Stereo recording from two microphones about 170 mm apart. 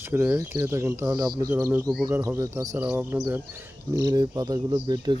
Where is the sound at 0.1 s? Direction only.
15° right (ahead or behind).